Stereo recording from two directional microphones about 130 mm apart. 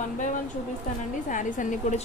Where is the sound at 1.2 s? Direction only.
80° left.